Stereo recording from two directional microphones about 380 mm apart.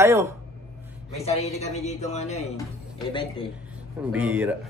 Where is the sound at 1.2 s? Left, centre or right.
Centre.